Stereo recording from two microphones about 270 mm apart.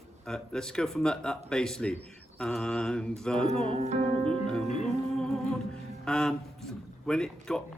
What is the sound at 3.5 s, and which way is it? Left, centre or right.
Music, right.